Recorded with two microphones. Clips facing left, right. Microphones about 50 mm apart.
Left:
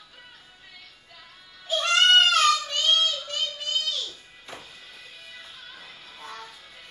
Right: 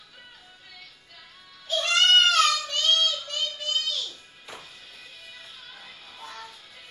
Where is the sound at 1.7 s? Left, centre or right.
Centre.